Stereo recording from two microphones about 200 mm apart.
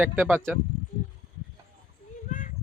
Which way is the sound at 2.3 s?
40° left (ahead or behind).